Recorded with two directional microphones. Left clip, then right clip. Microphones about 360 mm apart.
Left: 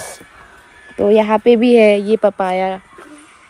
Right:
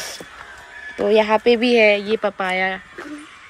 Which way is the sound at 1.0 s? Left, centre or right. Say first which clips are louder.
Left 4 dB; centre.